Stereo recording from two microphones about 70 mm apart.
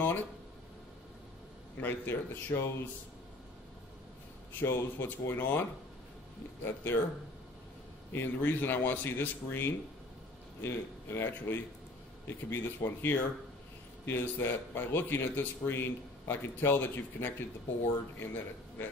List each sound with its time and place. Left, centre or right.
0.0 s a sound: left
1.8 s a man's voice: left
4.6 s a man's voice: left
8.1 s a man's voice: left